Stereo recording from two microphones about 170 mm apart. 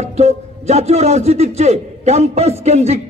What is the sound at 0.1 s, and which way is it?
A man's voice, 40° right (ahead or behind).